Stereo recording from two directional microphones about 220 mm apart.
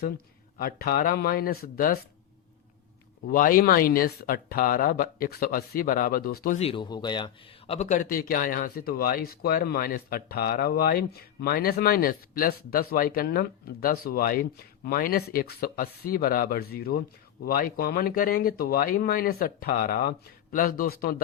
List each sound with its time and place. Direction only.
0.6 s speech: 40° left (ahead or behind)
3.3 s speech: 40° left (ahead or behind)
6.6 s speech: 25° left (ahead or behind)
7.7 s speech: 30° left (ahead or behind)